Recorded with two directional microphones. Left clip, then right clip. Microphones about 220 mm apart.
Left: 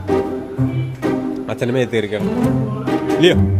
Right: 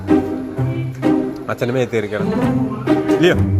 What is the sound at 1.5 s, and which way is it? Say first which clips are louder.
Speech: even; 15° left (ahead or behind).